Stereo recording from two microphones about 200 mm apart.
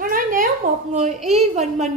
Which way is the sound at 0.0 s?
45° right (ahead or behind).